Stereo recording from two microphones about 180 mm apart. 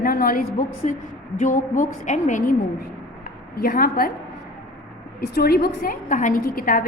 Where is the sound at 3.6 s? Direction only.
55° left (ahead or behind).